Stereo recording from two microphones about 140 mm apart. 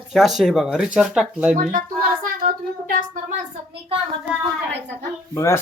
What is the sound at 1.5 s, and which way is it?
A woman's voice, 80° right.